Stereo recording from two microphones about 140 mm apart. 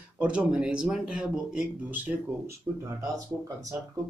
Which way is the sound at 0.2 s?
5° right (ahead or behind).